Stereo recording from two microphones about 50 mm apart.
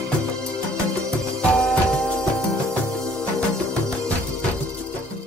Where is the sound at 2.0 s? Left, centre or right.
Left.